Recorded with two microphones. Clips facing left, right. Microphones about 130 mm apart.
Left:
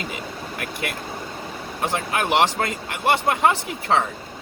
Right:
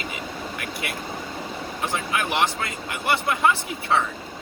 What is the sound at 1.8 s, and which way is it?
Speech, 40° left (ahead or behind).